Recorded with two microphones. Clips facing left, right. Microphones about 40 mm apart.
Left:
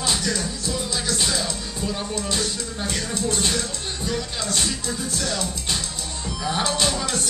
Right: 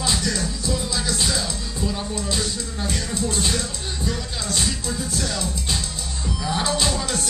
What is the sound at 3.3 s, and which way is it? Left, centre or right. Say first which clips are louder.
Speech: left 1 dB; centre.